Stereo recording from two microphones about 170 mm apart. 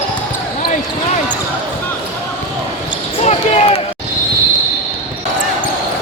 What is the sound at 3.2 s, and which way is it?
Basketball bounce, 35° left (ahead or behind).